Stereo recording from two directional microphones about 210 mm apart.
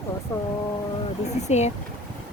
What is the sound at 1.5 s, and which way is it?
Speech, 30° left (ahead or behind).